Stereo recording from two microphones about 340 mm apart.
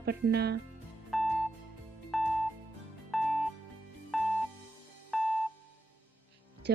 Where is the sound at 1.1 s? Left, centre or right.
Centre.